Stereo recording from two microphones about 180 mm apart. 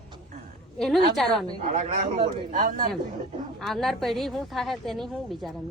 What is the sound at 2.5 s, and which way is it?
Speech, 45° right (ahead or behind).